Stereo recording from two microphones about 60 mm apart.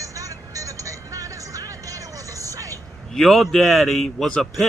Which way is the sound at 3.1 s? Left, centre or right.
Centre.